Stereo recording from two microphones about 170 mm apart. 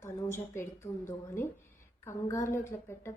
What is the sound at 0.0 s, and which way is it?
A woman's voice, 15° left (ahead or behind).